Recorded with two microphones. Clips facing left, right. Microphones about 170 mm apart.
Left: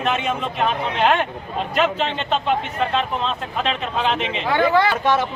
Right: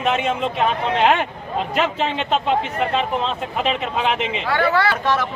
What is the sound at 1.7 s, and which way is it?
Speech, 10° right (ahead or behind).